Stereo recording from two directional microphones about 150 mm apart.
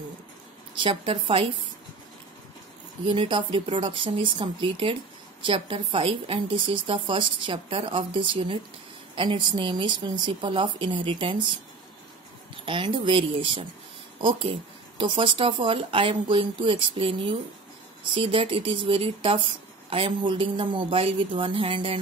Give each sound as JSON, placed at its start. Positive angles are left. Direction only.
{"t": 0.7, "sound": "speech", "side_deg": -35}
{"t": 3.1, "sound": "speech", "side_deg": -35}
{"t": 12.6, "sound": "speech", "side_deg": -35}